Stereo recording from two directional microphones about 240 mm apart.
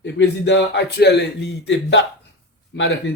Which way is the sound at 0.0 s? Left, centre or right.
Left.